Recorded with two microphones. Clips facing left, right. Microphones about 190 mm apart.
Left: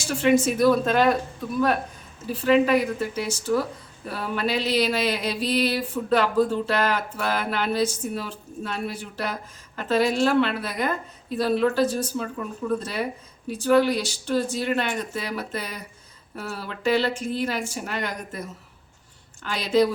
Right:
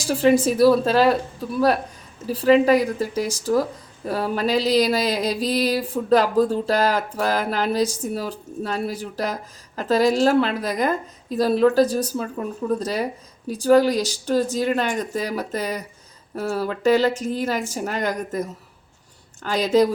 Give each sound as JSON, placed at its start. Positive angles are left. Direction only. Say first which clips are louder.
{"t": 0.0, "sound": "speech", "louder": "right 3 dB", "side_deg": -35}